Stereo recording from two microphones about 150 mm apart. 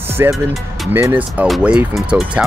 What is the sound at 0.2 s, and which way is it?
Speech, 20° right (ahead or behind).